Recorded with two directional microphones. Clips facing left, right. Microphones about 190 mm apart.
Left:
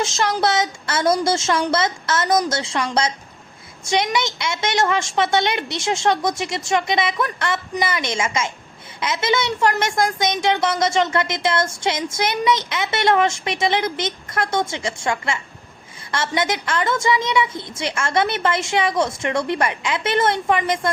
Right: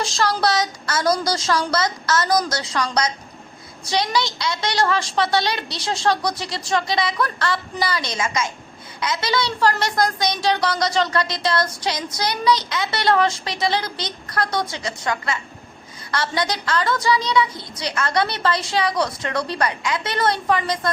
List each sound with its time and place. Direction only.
0.0 s a woman's voice: 20° left (ahead or behind)